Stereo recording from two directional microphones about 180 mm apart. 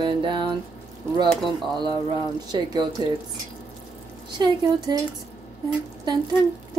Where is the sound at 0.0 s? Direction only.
25° right (ahead or behind).